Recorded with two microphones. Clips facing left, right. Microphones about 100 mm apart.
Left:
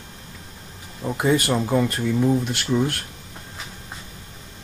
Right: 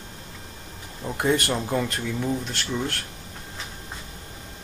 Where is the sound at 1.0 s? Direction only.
Centre (ahead or behind).